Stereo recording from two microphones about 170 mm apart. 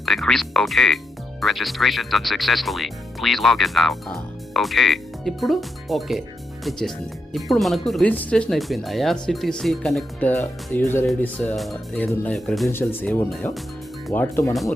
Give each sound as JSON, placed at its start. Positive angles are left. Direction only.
{"t": 0.0, "sound": "speech", "side_deg": 0}
{"t": 11.5, "sound": "speech", "side_deg": 0}
{"t": 12.7, "sound": "speech", "side_deg": 10}
{"t": 14.5, "sound": "speech", "side_deg": 0}